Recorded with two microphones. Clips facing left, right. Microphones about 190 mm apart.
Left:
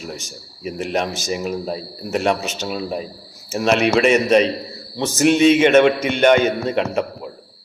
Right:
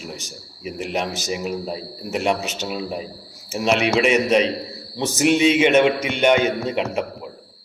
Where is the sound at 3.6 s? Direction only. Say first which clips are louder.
Left 2 dB; 55° left (ahead or behind).